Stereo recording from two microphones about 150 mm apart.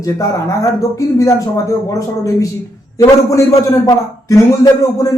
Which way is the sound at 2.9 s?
20° left (ahead or behind).